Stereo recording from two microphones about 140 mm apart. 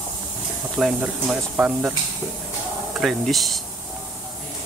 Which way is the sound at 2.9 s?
Centre (ahead or behind).